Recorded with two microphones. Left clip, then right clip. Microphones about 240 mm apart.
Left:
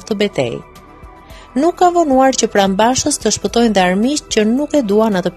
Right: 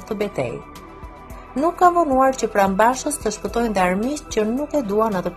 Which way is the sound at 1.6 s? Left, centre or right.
Left.